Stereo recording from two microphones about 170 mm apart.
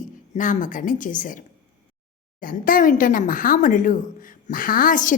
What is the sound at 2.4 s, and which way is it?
A woman's voice, 55° left (ahead or behind).